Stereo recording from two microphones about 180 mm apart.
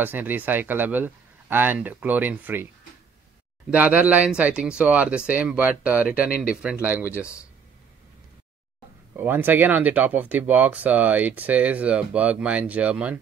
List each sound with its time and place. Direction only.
0.0 s speech: 10° right (ahead or behind)
3.7 s speech: 10° right (ahead or behind)
7.1 s speech: 15° left (ahead or behind)
9.1 s speech: 10° right (ahead or behind)